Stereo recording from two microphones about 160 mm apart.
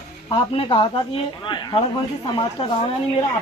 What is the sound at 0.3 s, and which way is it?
Speech, 35° left (ahead or behind).